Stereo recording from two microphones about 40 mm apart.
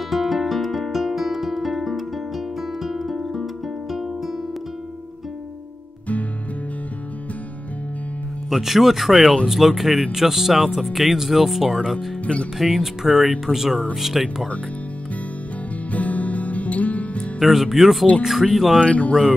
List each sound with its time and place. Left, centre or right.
0.1 s music: centre
8.5 s speech: centre
15.9 s music: left
17.4 s speech: centre
18.8 s speech: left